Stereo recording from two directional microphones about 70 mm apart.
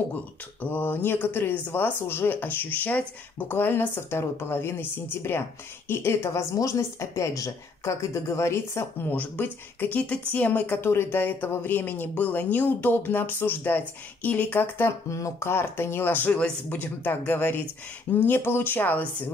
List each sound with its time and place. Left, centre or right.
0.1 s speech: left
6.5 s a woman's voice: left
9.1 s speech: left
14.9 s speech: left